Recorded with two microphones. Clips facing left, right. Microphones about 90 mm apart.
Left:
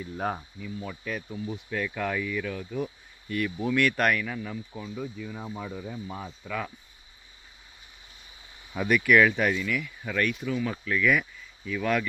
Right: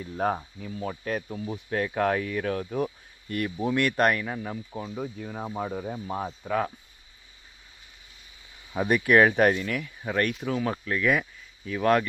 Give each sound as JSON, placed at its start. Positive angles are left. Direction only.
{"t": 0.0, "sound": "speech", "side_deg": -40}
{"t": 3.6, "sound": "speech", "side_deg": -35}
{"t": 8.7, "sound": "speech", "side_deg": -30}